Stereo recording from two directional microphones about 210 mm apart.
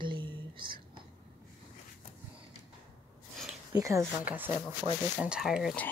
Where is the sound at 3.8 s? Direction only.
15° right (ahead or behind).